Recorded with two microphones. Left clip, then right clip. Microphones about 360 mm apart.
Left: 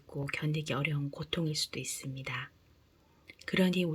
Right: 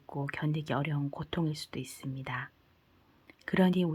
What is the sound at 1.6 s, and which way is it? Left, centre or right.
Speech, right.